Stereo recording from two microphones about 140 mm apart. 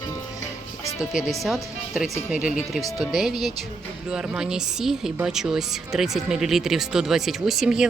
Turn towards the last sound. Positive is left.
turn(degrees=-5)  # may be behind; listen again after turning